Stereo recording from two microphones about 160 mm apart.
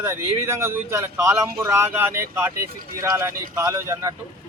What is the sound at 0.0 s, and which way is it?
Speech, 15° right (ahead or behind).